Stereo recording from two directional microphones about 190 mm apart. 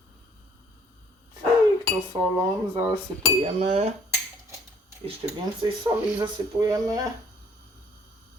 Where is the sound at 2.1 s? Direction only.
30° right (ahead or behind).